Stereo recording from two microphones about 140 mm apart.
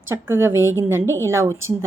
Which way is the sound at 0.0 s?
15° right (ahead or behind).